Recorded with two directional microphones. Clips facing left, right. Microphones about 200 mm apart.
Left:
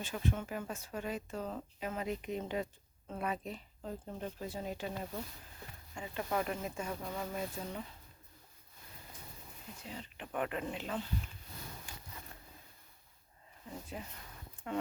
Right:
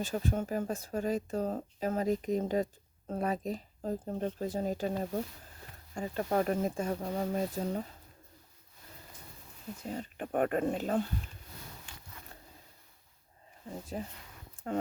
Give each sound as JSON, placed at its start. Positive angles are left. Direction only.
{"t": 0.0, "sound": "speech", "side_deg": -40}
{"t": 9.8, "sound": "speech", "side_deg": -45}
{"t": 13.9, "sound": "speech", "side_deg": -35}